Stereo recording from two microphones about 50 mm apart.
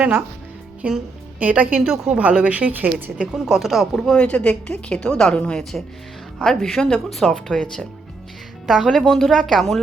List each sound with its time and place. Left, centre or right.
0.8 s a woman's voice: right
1.7 s a woman's voice: centre
2.1 s a woman's voice: right
3.3 s a woman's voice: centre
4.1 s a woman's voice: centre
8.6 s a woman's voice: centre